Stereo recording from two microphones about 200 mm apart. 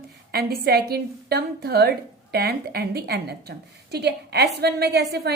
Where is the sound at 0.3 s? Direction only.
50° right (ahead or behind).